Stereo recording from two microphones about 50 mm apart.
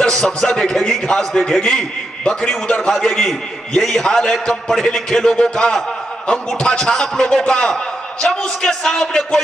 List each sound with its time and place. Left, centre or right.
0.0 s a man's voice: centre